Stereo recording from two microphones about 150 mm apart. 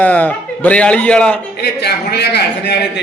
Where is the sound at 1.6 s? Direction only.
90° left.